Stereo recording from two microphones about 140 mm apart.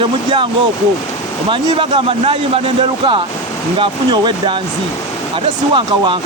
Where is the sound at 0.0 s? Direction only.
35° right (ahead or behind).